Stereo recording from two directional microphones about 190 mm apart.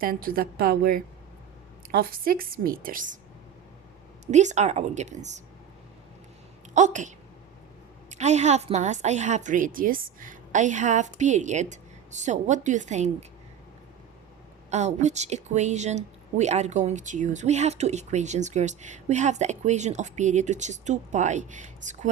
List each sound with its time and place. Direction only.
0.0 s a woman's voice: 50° right (ahead or behind)
4.3 s a woman's voice: 40° right (ahead or behind)
6.7 s a woman's voice: 40° right (ahead or behind)
8.1 s a woman's voice: 35° right (ahead or behind)
14.7 s a woman's voice: 35° right (ahead or behind)